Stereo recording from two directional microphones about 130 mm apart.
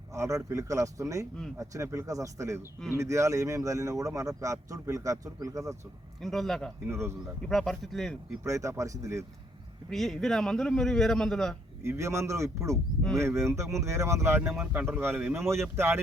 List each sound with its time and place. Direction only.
0.1 s speech: 25° right (ahead or behind)
6.2 s a man's voice: centre (ahead or behind)
6.8 s speech: 20° right (ahead or behind)
7.4 s a man's voice: centre (ahead or behind)
8.4 s speech: 25° right (ahead or behind)
9.9 s a man's voice: centre (ahead or behind)
11.8 s speech: 20° right (ahead or behind)